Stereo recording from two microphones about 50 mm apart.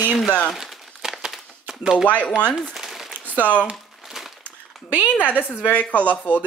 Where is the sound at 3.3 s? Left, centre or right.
Left.